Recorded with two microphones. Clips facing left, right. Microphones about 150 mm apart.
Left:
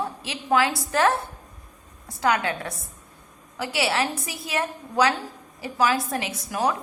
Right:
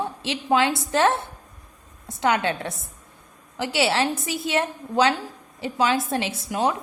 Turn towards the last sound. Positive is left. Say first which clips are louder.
# right 1 dB
turn(degrees=-25)  # may be behind; listen again after turning